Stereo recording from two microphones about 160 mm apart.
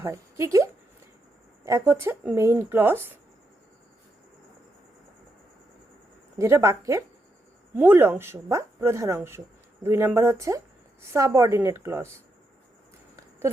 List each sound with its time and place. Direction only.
0.0 s speech: 20° right (ahead or behind)
6.4 s a woman's voice: 20° right (ahead or behind)